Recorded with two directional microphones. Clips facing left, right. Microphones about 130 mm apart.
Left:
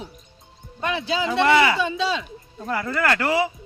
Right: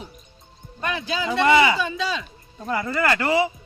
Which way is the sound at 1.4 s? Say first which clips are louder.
Right 1 dB; centre (ahead or behind).